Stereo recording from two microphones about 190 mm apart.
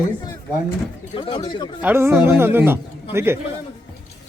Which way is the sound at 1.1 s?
25° left (ahead or behind).